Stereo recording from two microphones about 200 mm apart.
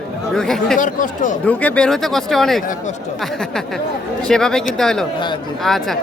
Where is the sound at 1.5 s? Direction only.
5° left (ahead or behind).